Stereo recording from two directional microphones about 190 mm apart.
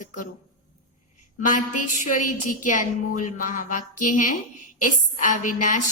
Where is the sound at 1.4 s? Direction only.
45° left (ahead or behind).